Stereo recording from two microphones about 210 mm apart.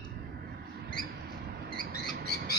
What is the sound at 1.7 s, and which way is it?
Rodents, 45° right (ahead or behind).